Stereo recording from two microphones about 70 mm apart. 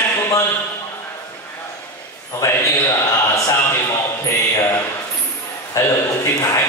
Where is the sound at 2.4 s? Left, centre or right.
Left.